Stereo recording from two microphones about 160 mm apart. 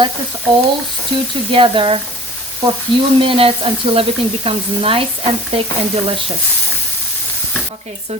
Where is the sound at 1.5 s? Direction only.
35° right (ahead or behind).